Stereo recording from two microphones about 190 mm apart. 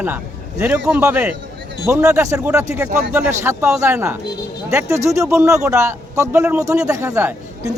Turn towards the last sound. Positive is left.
turn(degrees=-15)  # may be behind; listen again after turning